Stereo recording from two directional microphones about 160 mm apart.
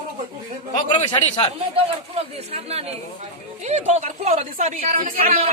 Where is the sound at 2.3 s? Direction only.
40° right (ahead or behind).